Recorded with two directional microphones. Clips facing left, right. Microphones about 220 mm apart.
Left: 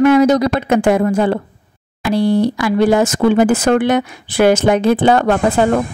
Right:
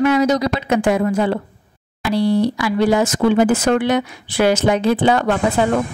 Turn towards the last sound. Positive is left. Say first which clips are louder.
# left 3 dB
turn(degrees=50)  # may be behind; listen again after turning